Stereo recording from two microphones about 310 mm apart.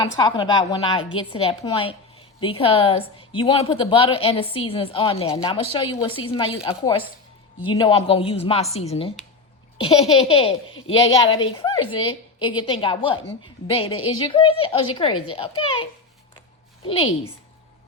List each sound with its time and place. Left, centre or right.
0.2 s a woman's voice: centre
8.7 s laughter: centre
11.4 s a woman's voice: centre
13.7 s laughter: centre
14.3 s a woman's voice: centre
16.8 s laughter: centre